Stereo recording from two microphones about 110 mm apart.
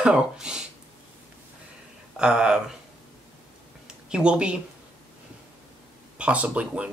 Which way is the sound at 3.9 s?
10° right (ahead or behind).